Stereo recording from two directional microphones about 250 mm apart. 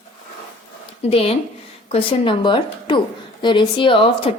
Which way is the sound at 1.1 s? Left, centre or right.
Left.